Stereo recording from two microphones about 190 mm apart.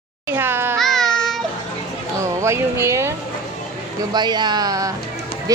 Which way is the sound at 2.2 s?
15° right (ahead or behind).